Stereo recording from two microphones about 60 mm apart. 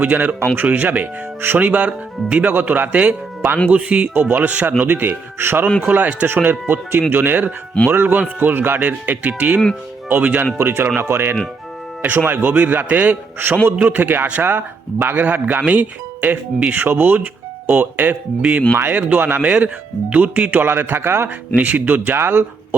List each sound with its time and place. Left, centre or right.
0.0 s speech: right
2.5 s speech: right
5.8 s speech: right
6.2 s speech: right
10.6 s speech: right
16.7 s speech: right
19.4 s speech: centre; by 21.2 s right
21.5 s speech: right